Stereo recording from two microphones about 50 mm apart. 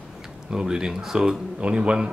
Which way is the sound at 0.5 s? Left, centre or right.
Centre.